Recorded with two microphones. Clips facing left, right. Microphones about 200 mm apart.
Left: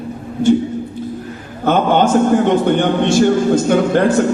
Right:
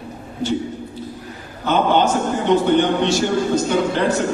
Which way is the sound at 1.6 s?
50° left (ahead or behind).